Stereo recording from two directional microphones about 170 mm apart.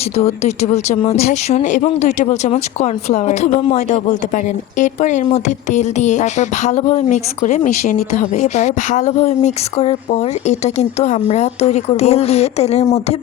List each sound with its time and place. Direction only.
0.3 s speech: 40° left (ahead or behind)